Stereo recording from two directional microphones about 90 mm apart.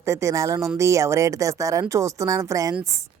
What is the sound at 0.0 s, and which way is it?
Speech, 30° right (ahead or behind).